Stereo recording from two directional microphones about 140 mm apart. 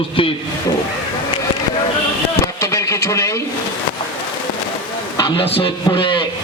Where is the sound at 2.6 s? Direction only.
20° left (ahead or behind).